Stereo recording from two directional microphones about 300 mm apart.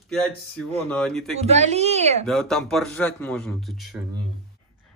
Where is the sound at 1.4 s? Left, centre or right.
Right.